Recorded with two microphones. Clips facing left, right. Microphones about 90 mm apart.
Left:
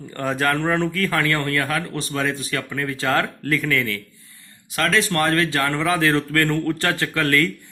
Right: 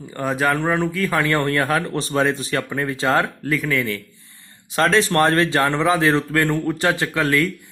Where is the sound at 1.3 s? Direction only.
30° right (ahead or behind).